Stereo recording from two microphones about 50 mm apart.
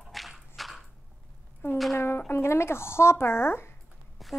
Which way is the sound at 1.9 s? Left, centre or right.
Left.